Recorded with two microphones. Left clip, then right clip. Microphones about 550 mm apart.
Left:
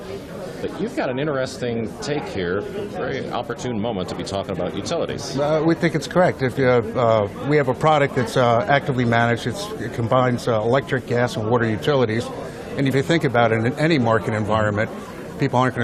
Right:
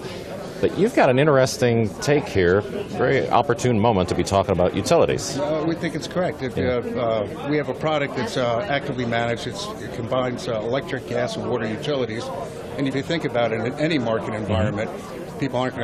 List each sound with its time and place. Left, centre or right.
0.9 s speech: right
5.6 s a man's voice: left